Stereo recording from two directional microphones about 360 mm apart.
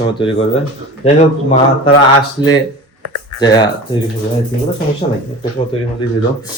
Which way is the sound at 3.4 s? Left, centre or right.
Centre.